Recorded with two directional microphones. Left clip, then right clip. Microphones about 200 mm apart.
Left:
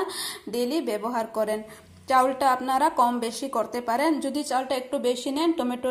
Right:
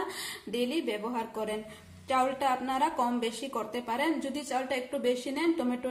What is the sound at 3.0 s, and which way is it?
A woman's voice, 25° left (ahead or behind).